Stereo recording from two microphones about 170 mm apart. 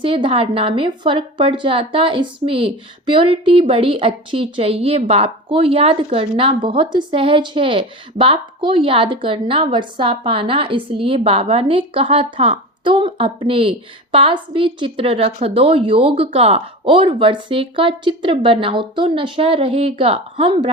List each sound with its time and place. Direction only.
0.0 s a woman's voice: 30° right (ahead or behind)